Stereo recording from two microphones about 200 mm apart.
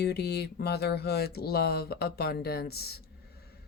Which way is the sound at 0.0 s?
55° left (ahead or behind).